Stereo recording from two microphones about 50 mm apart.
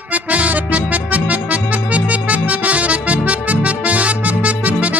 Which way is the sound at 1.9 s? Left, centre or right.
Right.